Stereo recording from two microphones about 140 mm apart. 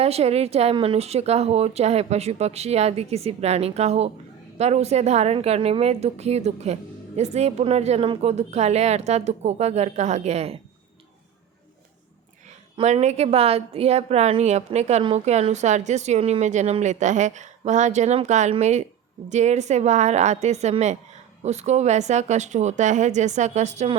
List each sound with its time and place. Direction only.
0.0 s speech: 45° right (ahead or behind)
12.8 s a woman's voice: 55° right (ahead or behind)